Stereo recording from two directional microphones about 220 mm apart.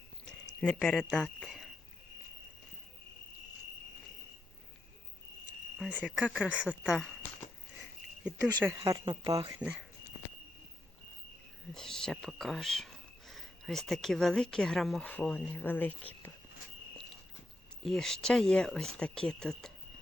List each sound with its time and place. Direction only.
0.3 s speech: 5° left (ahead or behind)
5.7 s speech: 5° right (ahead or behind)
8.4 s speech: 15° right (ahead or behind)
9.6 s speech: 5° right (ahead or behind)
11.7 s speech: centre (ahead or behind)
17.8 s speech: centre (ahead or behind)